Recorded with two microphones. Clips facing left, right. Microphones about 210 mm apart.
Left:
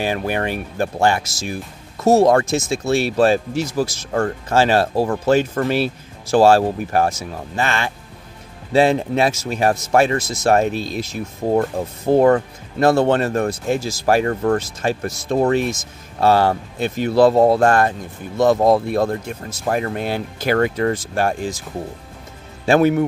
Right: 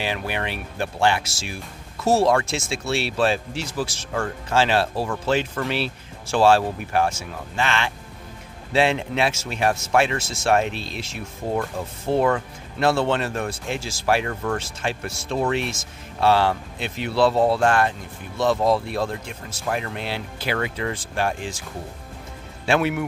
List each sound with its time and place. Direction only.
0.0 s speech: 45° left (ahead or behind)
22.7 s speech: 40° left (ahead or behind)